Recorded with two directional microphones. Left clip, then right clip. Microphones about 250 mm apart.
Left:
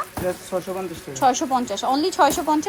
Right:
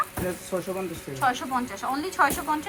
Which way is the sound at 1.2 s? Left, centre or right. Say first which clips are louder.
Left 6 dB; left.